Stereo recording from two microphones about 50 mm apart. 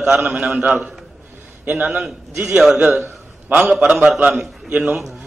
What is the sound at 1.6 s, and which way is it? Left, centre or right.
A man's voice, right.